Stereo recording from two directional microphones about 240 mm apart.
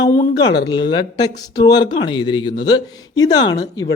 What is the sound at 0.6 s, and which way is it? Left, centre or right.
Speech, centre.